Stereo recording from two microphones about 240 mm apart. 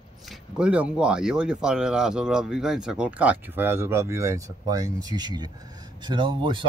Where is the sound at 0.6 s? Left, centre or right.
Centre.